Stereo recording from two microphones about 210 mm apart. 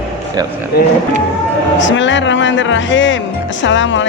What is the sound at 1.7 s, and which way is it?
Speech, 60° left (ahead or behind).